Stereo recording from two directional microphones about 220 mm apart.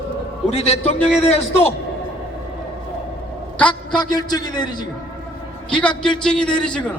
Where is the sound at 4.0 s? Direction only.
20° left (ahead or behind).